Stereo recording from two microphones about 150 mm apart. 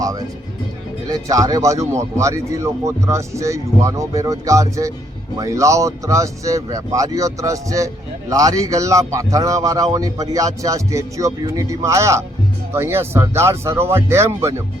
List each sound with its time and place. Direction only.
0.0 s a man's voice: 25° right (ahead or behind)